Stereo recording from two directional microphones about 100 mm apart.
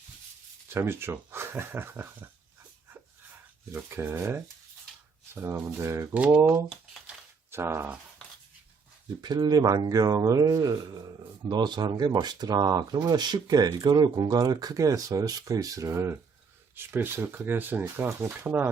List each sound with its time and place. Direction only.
0.7 s speech: 25° right (ahead or behind)
3.8 s speech: 20° right (ahead or behind)
6.1 s speech: 15° right (ahead or behind)
9.2 s a man's voice: 45° right (ahead or behind); by 18.7 s 20° right (ahead or behind)